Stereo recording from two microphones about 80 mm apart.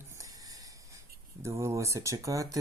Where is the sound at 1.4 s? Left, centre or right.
Right.